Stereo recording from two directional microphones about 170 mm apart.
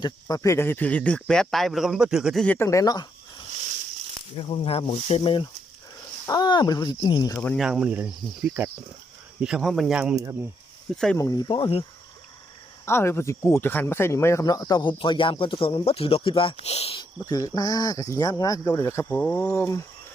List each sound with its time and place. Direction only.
0.0 s speech: 20° left (ahead or behind)
4.4 s speech: 35° left (ahead or behind)
7.4 s speech: centre (ahead or behind)
11.2 s speech: 20° left (ahead or behind)
12.8 s speech: 15° left (ahead or behind)